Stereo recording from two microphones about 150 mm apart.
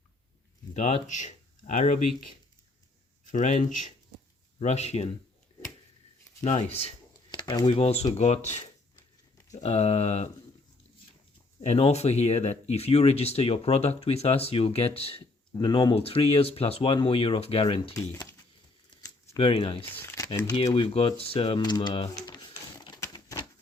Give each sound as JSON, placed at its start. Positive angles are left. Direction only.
{"t": 0.7, "sound": "speech", "side_deg": 55}
{"t": 3.3, "sound": "speech", "side_deg": 55}
{"t": 6.4, "sound": "speech", "side_deg": 50}
{"t": 7.3, "sound": "speech", "side_deg": 30}
{"t": 9.6, "sound": "speech", "side_deg": 45}
{"t": 11.6, "sound": "speech", "side_deg": 45}
{"t": 15.5, "sound": "speech", "side_deg": 30}
{"t": 17.9, "sound": "speech", "side_deg": 25}
{"t": 19.4, "sound": "speech", "side_deg": 35}
{"t": 19.8, "sound": "speech", "side_deg": 15}
{"t": 22.1, "sound": "a sound", "side_deg": 30}